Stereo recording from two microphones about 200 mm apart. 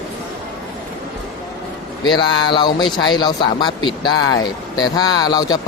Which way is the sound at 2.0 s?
25° left (ahead or behind).